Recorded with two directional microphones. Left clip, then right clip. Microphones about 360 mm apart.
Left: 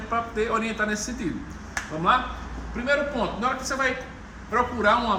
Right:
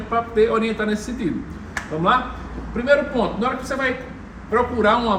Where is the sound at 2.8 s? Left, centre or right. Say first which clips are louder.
Right 6 dB; centre.